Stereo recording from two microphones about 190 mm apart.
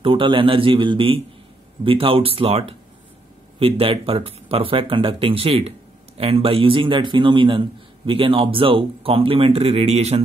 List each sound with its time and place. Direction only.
0.0 s a man's voice: 25° right (ahead or behind)